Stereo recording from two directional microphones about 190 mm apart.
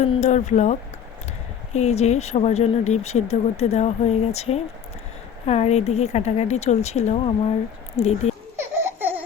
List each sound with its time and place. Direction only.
0.0 s speech: 40° left (ahead or behind)
8.5 s baby laughter: 10° right (ahead or behind)